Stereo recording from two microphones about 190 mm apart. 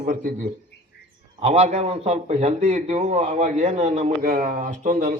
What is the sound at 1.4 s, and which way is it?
A man's voice, 35° right (ahead or behind).